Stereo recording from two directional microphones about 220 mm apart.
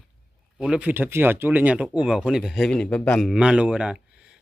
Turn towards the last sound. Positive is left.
turn(degrees=-5)  # may be behind; listen again after turning